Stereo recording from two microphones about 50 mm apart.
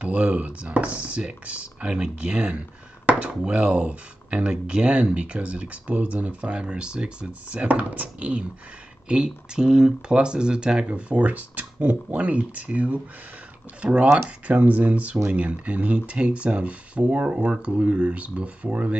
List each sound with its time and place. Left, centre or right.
0.0 s speech: right